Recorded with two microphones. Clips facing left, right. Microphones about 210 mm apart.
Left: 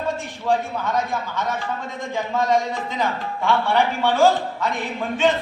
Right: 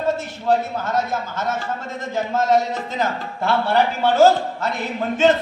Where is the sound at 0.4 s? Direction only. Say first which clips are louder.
Right 2 dB; 40° right (ahead or behind).